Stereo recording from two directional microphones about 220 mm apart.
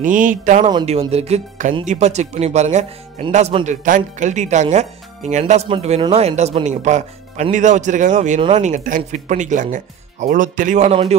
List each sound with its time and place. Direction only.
0.0 s speech: 35° right (ahead or behind)
0.7 s speech: 25° right (ahead or behind)